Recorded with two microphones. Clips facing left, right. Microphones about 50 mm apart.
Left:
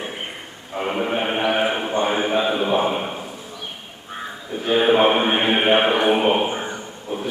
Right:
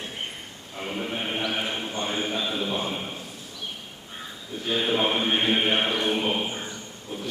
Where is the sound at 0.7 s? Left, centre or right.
Left.